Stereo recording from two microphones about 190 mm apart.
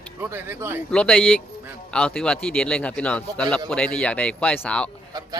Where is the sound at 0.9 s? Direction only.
5° left (ahead or behind).